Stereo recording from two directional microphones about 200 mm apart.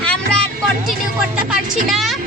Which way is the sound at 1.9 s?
Centre (ahead or behind).